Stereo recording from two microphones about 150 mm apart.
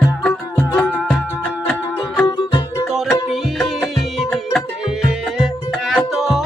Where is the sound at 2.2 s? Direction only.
25° left (ahead or behind).